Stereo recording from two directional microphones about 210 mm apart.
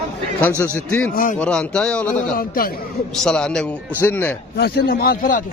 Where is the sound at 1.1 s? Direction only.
40° left (ahead or behind).